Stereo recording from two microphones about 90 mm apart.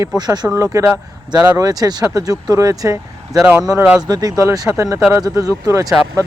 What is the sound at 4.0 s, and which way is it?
Speech, 45° right (ahead or behind).